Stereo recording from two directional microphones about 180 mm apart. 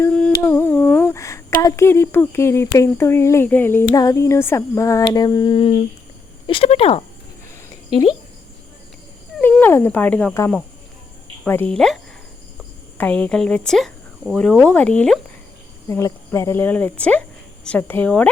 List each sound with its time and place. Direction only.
0.0 s humming: 5° left (ahead or behind)
0.4 s a sound: 10° left (ahead or behind)
1.6 s speech: 15° left (ahead or behind); by 7.0 s 35° left (ahead or behind)
9.4 s speech: 10° left (ahead or behind)
11.4 s speech: 10° left (ahead or behind)
13.0 s speech: 10° left (ahead or behind)
15.9 s speech: 15° left (ahead or behind)